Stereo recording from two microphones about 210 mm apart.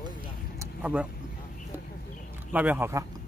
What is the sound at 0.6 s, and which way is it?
Vehicle, 5° right (ahead or behind).